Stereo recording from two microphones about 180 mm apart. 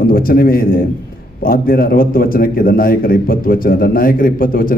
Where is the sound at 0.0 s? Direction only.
55° left (ahead or behind).